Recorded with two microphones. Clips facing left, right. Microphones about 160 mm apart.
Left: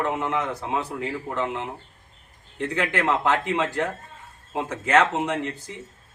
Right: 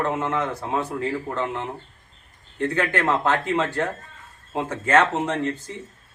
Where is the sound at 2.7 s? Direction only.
15° left (ahead or behind).